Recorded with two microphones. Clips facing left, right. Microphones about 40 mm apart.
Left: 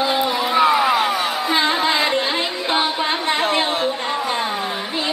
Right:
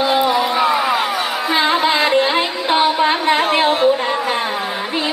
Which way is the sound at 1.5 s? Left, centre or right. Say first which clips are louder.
Right 3 dB; centre.